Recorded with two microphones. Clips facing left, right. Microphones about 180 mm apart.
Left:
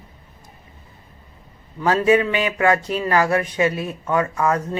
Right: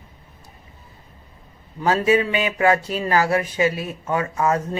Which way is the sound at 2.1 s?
30° right (ahead or behind).